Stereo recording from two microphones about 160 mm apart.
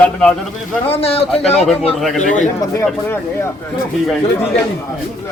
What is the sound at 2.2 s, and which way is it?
Speech, 50° left (ahead or behind).